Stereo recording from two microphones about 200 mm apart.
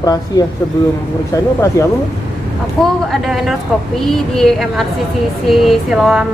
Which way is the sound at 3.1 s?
Centre (ahead or behind).